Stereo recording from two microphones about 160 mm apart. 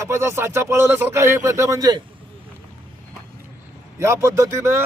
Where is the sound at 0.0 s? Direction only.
15° right (ahead or behind).